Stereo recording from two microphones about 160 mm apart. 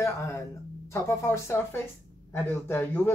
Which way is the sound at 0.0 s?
15° left (ahead or behind).